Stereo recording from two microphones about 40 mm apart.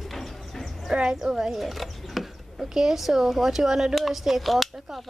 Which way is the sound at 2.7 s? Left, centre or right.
Centre.